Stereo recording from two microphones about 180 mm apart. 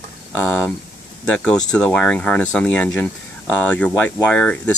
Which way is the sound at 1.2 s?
5° left (ahead or behind).